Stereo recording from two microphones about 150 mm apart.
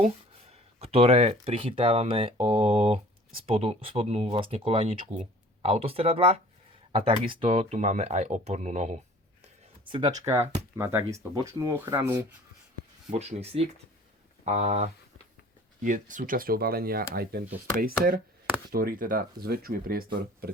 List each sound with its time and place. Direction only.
0.5 s speech: 40° right (ahead or behind)
9.4 s a sound: 35° right (ahead or behind)
10.2 s speech: 15° right (ahead or behind)
13.1 s speech: 45° right (ahead or behind)
15.8 s speech: 60° right (ahead or behind); by 20.1 s 80° right